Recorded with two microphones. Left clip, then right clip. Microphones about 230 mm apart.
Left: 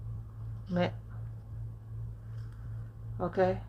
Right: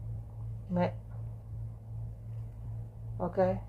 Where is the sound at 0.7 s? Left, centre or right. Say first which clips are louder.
Even; left.